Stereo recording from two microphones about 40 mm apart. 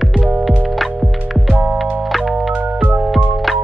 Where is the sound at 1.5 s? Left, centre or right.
Right.